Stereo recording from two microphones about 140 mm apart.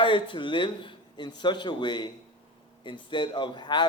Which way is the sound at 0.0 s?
35° left (ahead or behind).